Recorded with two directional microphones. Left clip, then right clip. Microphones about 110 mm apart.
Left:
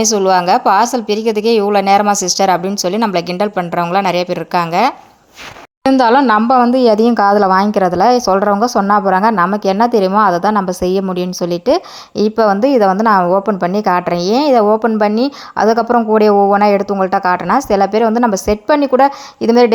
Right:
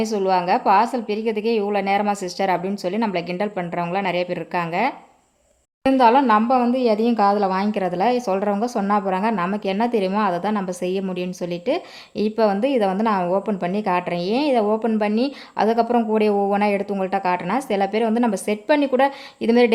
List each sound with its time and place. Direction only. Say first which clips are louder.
0.0 s a woman's voice: left 8 dB; 40° left (ahead or behind)
5.8 s speech: left 5 dB; 60° left (ahead or behind)
6.7 s a woman's voice: left 8 dB; 80° left; by 13.4 s 40° left (ahead or behind)
13.5 s a woman's voice: left 9 dB; 30° left (ahead or behind)
13.7 s a woman's voice: left 7 dB; 45° left (ahead or behind)